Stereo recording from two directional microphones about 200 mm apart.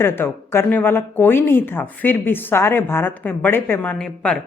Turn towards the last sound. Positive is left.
turn(degrees=5)  # may be behind; listen again after turning